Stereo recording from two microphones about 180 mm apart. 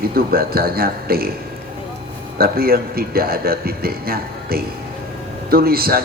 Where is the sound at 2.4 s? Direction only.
55° right (ahead or behind).